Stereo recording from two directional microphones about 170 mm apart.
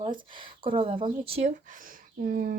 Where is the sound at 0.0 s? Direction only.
30° right (ahead or behind).